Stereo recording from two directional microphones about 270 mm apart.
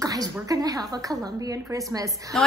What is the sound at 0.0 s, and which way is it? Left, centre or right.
A woman's voice, centre.